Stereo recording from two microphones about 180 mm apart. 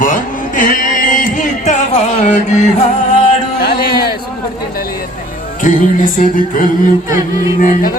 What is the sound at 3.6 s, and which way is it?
Speech, 60° left (ahead or behind).